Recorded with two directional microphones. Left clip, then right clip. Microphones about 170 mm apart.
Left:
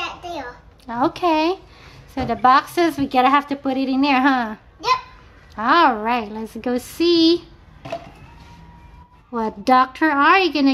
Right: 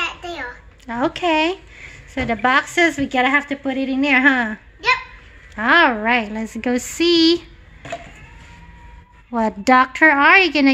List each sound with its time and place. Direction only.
0.2 s a sound: 5° left (ahead or behind)
0.8 s speech: 10° right (ahead or behind)
5.6 s a woman's voice: 15° right (ahead or behind); by 7.4 s 30° right (ahead or behind)
9.3 s a woman's voice: 25° right (ahead or behind)